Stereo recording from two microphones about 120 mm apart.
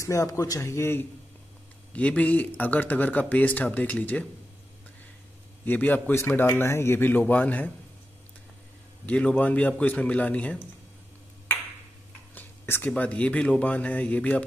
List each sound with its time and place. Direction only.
0.0 s a man's voice: 25° left (ahead or behind)
5.7 s speech: 15° left (ahead or behind)
9.0 s speech: 10° left (ahead or behind)
12.4 s speech: 15° left (ahead or behind)